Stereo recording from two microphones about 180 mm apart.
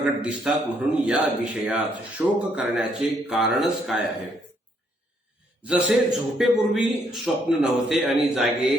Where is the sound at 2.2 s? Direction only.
5° right (ahead or behind).